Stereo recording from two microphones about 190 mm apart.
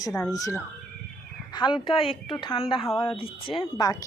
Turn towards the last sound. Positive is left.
turn(degrees=20)  # may be behind; listen again after turning